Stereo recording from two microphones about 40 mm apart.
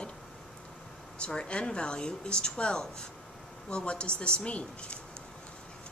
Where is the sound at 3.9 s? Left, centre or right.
Left.